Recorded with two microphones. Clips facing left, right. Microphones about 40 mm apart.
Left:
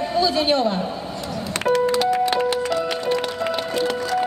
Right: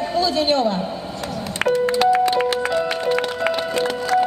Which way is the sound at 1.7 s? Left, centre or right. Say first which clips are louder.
Even; right.